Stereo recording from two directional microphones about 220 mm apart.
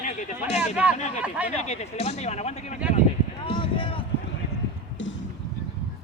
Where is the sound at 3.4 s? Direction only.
25° left (ahead or behind).